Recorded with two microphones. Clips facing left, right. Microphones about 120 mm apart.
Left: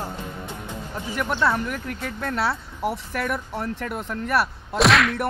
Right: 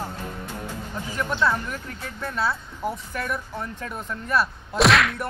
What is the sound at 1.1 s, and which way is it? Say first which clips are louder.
Speech: left 1 dB; 65° left (ahead or behind).